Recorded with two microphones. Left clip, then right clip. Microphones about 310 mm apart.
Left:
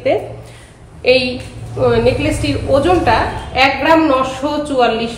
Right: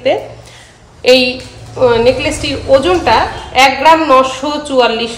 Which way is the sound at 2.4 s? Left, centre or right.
Right.